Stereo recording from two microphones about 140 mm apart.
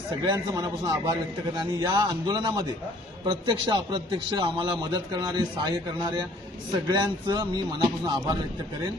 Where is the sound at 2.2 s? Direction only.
30° right (ahead or behind).